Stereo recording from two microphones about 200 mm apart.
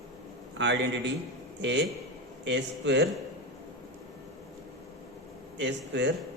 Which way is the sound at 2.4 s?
60° right (ahead or behind).